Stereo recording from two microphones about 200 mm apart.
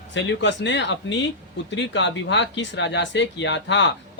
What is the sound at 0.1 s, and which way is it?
Speech, 65° left (ahead or behind).